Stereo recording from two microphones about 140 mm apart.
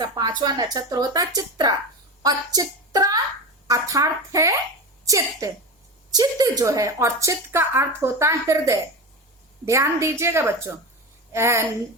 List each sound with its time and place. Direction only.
0.0 s a woman's voice: 30° right (ahead or behind)